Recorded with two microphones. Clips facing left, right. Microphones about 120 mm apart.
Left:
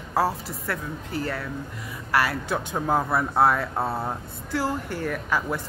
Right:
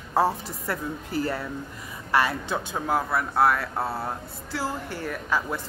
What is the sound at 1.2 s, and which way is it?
Speech, 25° right (ahead or behind).